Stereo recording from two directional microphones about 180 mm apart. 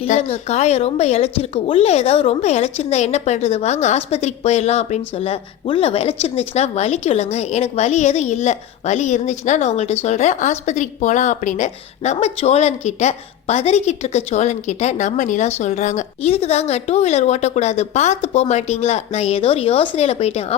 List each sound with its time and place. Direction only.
0.0 s a woman's voice: 35° left (ahead or behind)